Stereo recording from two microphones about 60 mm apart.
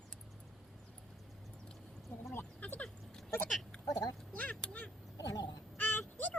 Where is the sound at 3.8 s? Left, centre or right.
Left.